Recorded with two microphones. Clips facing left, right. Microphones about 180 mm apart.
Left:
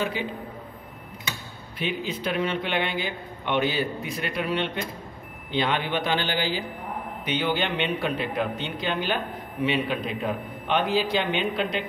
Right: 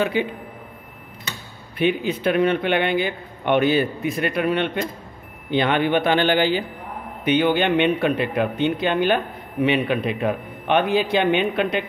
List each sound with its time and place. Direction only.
0.0 s speech: 65° right (ahead or behind)
1.8 s speech: 60° right (ahead or behind)